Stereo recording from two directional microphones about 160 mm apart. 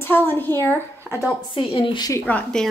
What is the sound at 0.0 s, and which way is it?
Speech, 10° left (ahead or behind).